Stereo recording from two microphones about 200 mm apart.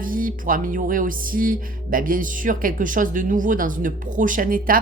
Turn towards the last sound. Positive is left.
turn(degrees=-45)  # may be behind; listen again after turning